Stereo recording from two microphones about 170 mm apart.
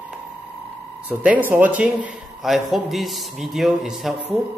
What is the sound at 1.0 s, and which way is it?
Speech, 10° right (ahead or behind).